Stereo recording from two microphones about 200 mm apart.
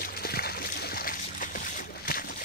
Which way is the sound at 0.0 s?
50° left (ahead or behind).